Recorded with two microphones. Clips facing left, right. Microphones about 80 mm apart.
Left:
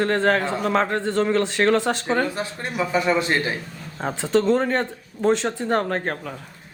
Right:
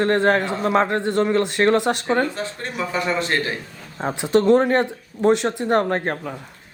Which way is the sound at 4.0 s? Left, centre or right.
Centre.